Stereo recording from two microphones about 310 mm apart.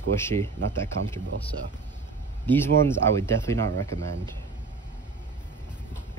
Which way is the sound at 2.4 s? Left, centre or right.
Centre.